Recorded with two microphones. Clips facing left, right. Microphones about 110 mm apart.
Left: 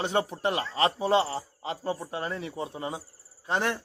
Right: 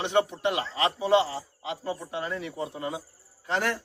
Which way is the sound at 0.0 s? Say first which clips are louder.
Right 2 dB; 35° left (ahead or behind).